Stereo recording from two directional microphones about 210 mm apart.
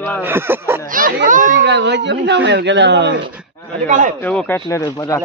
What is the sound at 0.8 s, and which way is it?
Speech, 40° right (ahead or behind).